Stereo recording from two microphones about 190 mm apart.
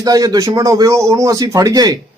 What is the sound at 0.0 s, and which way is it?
A man's voice, 20° right (ahead or behind).